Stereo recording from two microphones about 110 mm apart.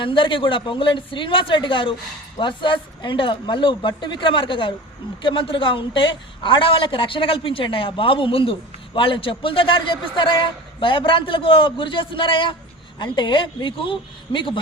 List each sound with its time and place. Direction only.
0.0 s a woman's voice: 50° left (ahead or behind)